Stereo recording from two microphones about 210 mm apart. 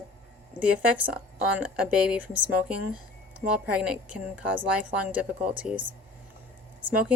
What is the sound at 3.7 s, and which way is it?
Speech, 5° right (ahead or behind).